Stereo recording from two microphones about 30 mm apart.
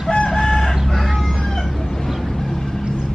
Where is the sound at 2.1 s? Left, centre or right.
Centre.